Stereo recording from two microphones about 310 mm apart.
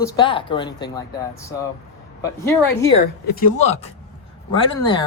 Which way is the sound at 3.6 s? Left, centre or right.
Centre.